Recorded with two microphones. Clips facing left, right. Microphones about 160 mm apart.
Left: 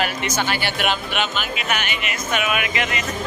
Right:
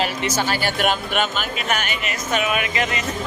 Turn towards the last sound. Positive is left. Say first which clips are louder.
# right 1 dB
turn(degrees=-30)  # may be behind; listen again after turning